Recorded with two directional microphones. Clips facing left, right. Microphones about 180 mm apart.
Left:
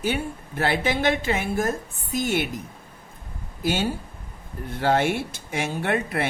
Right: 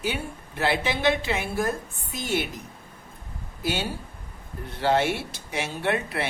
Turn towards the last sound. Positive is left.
turn(degrees=50)  # may be behind; listen again after turning